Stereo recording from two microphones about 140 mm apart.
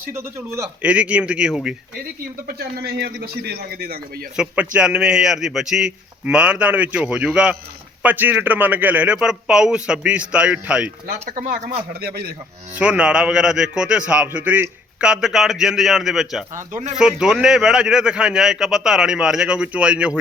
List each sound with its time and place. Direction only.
0.1 s a man's voice: 20° right (ahead or behind)
0.8 s a man's voice: 10° right (ahead or behind)
2.5 s a man's voice: 90° right
4.4 s a man's voice: 5° right (ahead or behind)
11.3 s speech: 80° right
11.9 s a man's voice: 90° right
12.7 s a man's voice: 10° right (ahead or behind)
16.7 s speech: 60° right (ahead or behind)
17.0 s a man's voice: 5° right (ahead or behind)